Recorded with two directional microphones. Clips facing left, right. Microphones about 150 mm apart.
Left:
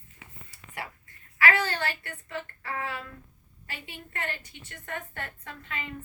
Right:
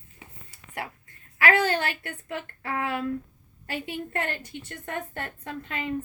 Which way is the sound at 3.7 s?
45° right (ahead or behind).